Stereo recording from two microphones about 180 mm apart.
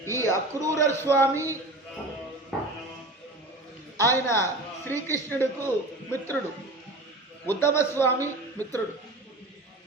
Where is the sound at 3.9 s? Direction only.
15° left (ahead or behind).